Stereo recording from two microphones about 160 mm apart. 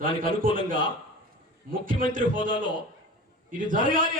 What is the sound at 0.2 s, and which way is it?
A man's voice, 60° right (ahead or behind).